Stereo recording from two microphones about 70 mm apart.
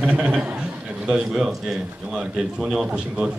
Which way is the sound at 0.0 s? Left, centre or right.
Centre.